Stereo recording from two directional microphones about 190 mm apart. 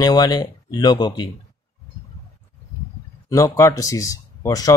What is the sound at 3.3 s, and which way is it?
Speech, 15° left (ahead or behind).